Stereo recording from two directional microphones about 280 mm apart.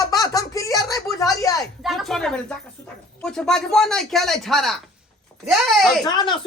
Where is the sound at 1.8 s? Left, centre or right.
Centre.